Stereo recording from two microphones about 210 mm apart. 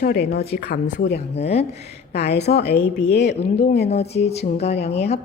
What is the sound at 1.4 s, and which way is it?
Speech, 30° left (ahead or behind).